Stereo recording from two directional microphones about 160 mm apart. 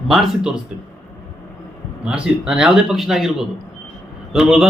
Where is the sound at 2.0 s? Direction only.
5° right (ahead or behind).